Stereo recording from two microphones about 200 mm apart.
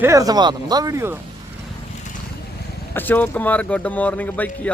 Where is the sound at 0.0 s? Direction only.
15° right (ahead or behind).